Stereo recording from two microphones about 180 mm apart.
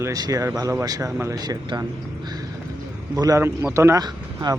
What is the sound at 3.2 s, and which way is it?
Speech, 15° right (ahead or behind).